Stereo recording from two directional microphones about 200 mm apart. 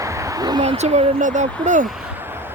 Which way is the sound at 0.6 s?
30° right (ahead or behind).